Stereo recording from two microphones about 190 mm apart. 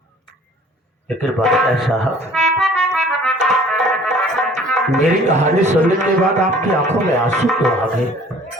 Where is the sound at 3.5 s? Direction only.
Centre (ahead or behind).